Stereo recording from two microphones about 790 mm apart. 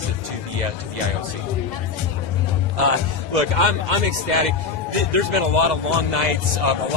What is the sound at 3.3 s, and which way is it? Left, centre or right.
Speech, right.